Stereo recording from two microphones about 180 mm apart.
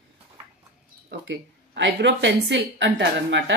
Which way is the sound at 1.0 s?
75° right (ahead or behind).